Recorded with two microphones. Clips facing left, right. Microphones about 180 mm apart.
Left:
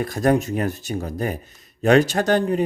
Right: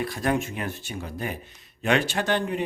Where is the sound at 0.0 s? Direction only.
45° left (ahead or behind).